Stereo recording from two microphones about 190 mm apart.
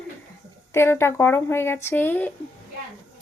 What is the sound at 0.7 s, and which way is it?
Speech, 15° left (ahead or behind).